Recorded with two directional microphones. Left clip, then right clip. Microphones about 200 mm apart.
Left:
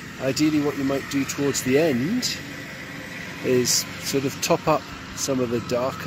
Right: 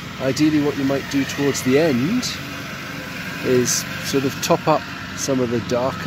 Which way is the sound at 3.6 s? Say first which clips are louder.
Right 2 dB; 5° left (ahead or behind).